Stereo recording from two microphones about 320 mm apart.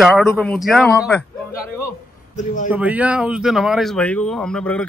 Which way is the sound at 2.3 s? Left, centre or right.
Left.